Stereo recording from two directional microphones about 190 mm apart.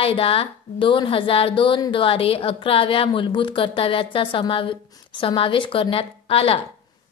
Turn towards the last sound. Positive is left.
turn(degrees=30)  # may be behind; listen again after turning